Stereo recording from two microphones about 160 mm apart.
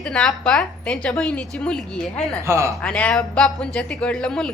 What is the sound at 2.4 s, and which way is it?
Speech, 20° right (ahead or behind).